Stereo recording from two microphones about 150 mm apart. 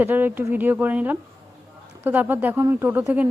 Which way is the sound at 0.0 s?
10° right (ahead or behind).